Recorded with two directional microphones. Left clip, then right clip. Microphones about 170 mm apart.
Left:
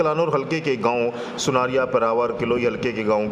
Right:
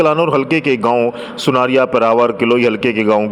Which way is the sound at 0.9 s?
20° right (ahead or behind).